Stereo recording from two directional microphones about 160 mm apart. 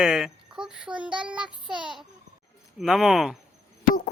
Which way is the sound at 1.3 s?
5° right (ahead or behind).